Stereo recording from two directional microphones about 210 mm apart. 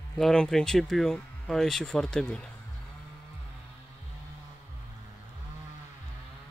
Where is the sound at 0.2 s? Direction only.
5° left (ahead or behind).